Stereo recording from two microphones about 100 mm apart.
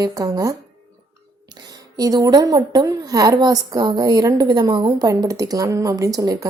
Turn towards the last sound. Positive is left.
turn(degrees=-40)  # may be behind; listen again after turning